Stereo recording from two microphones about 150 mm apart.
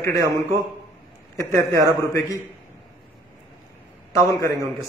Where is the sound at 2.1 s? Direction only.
20° left (ahead or behind).